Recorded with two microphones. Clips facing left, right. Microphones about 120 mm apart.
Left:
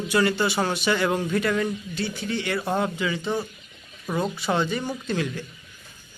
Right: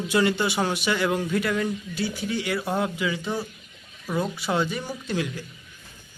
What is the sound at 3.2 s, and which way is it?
Speech, 15° left (ahead or behind).